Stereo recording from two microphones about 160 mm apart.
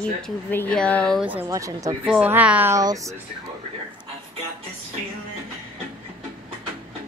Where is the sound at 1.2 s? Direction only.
10° right (ahead or behind).